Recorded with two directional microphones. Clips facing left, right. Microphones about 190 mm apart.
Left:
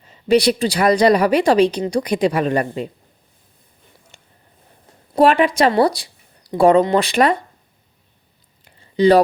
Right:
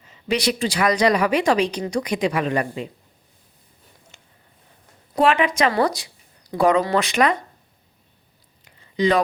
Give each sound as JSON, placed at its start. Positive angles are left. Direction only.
{"t": 0.1, "sound": "a woman's voice", "side_deg": 35}
{"t": 5.1, "sound": "a woman's voice", "side_deg": 35}
{"t": 8.6, "sound": "a sound", "side_deg": 30}